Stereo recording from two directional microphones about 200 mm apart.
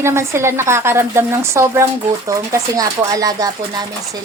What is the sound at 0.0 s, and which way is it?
A woman's voice, 15° right (ahead or behind).